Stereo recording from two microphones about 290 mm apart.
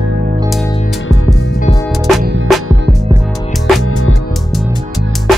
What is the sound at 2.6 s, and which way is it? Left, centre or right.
Music, right.